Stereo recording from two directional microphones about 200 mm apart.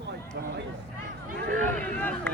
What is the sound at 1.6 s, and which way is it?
Speech, 10° left (ahead or behind).